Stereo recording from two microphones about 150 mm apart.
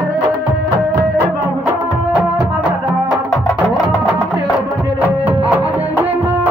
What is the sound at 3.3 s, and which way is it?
Music, 20° left (ahead or behind).